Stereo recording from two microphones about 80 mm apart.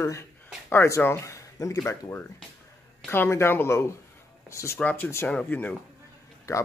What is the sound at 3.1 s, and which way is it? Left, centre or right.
Speech, left.